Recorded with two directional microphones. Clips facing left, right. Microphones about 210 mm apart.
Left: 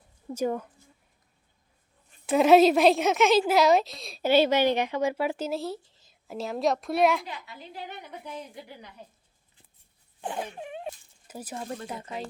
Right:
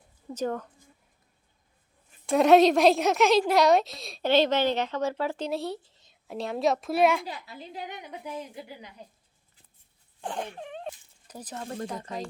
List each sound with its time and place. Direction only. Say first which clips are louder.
0.3 s speech: left 2 dB; 10° left (ahead or behind)
2.2 s a woman's voice: even; centre (ahead or behind)
7.3 s a woman's voice: right 2 dB; 35° right (ahead or behind)
7.7 s a woman's voice: right 1 dB; 15° right (ahead or behind)
10.2 s speech: left 1 dB; 10° left (ahead or behind)